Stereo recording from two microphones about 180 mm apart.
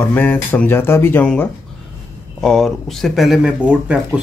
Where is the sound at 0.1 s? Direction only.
10° left (ahead or behind).